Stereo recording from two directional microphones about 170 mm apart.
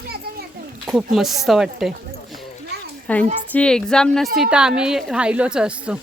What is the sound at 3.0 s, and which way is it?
A woman's voice, 10° left (ahead or behind).